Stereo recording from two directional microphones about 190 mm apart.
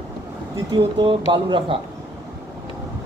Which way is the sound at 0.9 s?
25° right (ahead or behind).